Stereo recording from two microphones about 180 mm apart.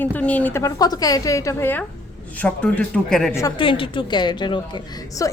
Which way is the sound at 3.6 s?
30° left (ahead or behind).